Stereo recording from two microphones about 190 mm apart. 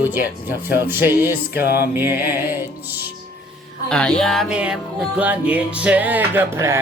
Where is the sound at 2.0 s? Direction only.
10° right (ahead or behind).